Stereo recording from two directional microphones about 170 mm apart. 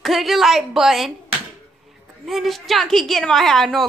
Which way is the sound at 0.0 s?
Centre (ahead or behind).